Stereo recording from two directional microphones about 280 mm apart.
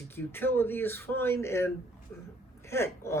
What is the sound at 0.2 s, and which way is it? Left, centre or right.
A woman's voice, centre.